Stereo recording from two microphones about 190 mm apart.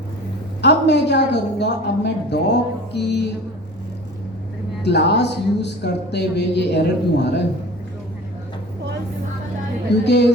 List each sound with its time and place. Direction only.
0.6 s a woman's voice: 65° left (ahead or behind)
4.8 s a woman's voice: 60° left (ahead or behind)